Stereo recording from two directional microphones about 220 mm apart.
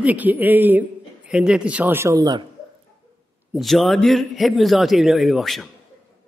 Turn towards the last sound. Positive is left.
turn(degrees=0)  # may be behind; listen again after turning